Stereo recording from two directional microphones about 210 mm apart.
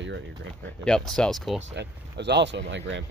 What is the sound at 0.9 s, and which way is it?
Speech, 5° left (ahead or behind).